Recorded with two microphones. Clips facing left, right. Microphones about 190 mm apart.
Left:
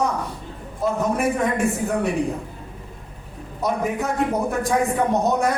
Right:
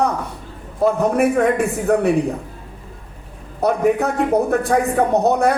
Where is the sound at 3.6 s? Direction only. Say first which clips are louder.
Right 7 dB; 65° right (ahead or behind).